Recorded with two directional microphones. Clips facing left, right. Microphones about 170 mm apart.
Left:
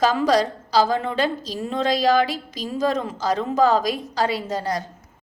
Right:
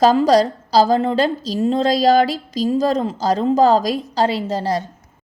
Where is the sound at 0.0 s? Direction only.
35° right (ahead or behind).